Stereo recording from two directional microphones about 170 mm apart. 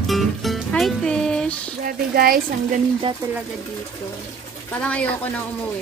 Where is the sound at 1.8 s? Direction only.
60° right (ahead or behind).